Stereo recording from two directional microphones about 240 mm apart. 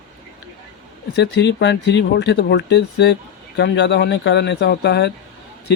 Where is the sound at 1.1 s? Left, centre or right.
Left.